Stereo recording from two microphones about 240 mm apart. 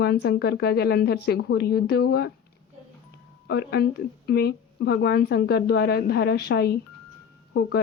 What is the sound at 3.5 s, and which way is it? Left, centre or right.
Speech, left.